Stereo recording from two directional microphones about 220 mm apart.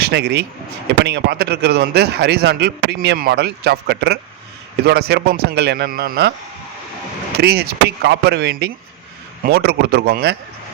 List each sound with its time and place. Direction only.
0.0 s speech: 50° right (ahead or behind)
7.3 s speech: 45° right (ahead or behind)